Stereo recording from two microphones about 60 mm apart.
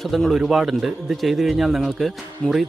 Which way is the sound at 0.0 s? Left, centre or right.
Centre.